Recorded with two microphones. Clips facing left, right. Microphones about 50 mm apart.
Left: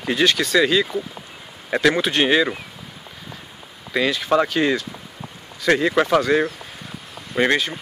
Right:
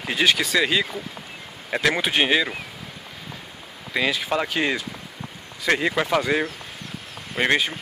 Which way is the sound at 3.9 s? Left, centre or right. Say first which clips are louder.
Left 4 dB; centre.